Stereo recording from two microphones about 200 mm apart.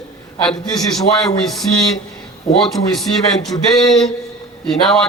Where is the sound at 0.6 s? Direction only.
20° left (ahead or behind).